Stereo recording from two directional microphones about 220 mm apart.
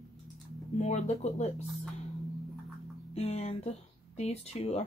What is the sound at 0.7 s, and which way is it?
Speech, 30° left (ahead or behind).